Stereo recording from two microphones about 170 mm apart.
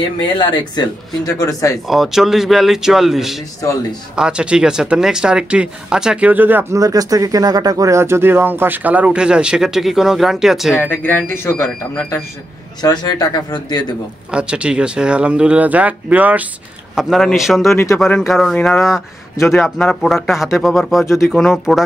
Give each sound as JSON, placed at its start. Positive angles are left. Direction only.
{"t": 0.4, "sound": "speech", "side_deg": 25}
{"t": 1.9, "sound": "speech", "side_deg": 0}
{"t": 10.8, "sound": "speech", "side_deg": 10}
{"t": 12.8, "sound": "speech", "side_deg": 25}
{"t": 14.3, "sound": "speech", "side_deg": -5}
{"t": 17.7, "sound": "speech", "side_deg": 15}
{"t": 18.0, "sound": "speech", "side_deg": 0}
{"t": 21.0, "sound": "speech", "side_deg": 15}
{"t": 21.3, "sound": "speech", "side_deg": 0}